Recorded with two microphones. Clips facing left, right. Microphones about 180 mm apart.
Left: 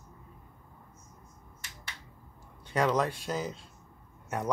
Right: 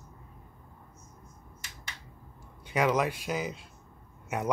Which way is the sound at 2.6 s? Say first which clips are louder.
Right 1 dB; 10° right (ahead or behind).